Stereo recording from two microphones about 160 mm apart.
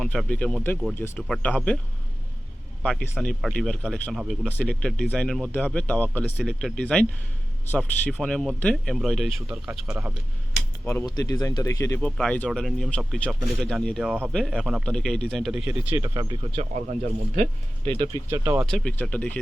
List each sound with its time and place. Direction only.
0.0 s speech: 5° left (ahead or behind)
2.8 s speech: centre (ahead or behind)
11.0 s speech: 25° left (ahead or behind)
11.9 s speech: 5° left (ahead or behind)
14.0 s speech: 5° right (ahead or behind)
14.3 s speech: 5° left (ahead or behind); by 16.6 s 30° right (ahead or behind)
16.7 s speech: 50° right (ahead or behind)
18.3 s speech: 15° right (ahead or behind)
18.6 s speech: 5° left (ahead or behind)